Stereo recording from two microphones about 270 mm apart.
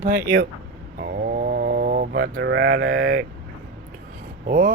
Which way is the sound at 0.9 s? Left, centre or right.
Right.